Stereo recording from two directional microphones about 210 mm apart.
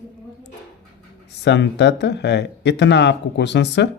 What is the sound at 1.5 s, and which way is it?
Speech, 55° left (ahead or behind).